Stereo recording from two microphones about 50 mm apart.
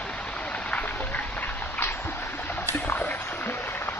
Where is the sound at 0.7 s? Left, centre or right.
Left.